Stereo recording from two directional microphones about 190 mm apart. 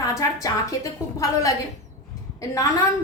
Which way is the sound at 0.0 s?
15° left (ahead or behind).